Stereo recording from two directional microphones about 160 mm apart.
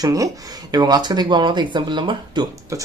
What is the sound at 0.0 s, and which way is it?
Speech, 20° right (ahead or behind).